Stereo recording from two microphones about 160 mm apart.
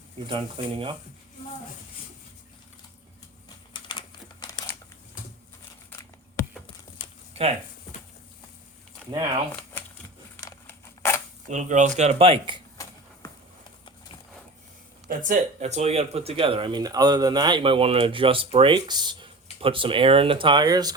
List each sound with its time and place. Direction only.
0.3 s speech: 35° right (ahead or behind)
3.7 s crumpling: 30° left (ahead or behind)
5.9 s a sound: 15° left (ahead or behind)
7.3 s speech: 40° right (ahead or behind)
10.4 s scissors: 15° left (ahead or behind)
11.4 s speech: 50° right (ahead or behind)
12.7 s a sound: 20° left (ahead or behind)
15.2 s speech: 50° right (ahead or behind); by 20.9 s 25° right (ahead or behind)